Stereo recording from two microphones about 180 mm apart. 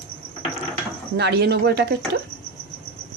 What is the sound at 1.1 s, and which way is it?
Speech, 70° right (ahead or behind).